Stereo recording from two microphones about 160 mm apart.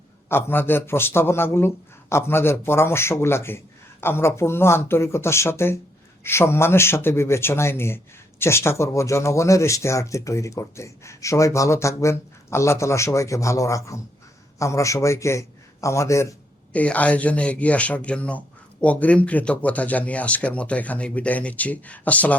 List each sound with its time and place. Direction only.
0.3 s a man's voice: 15° left (ahead or behind)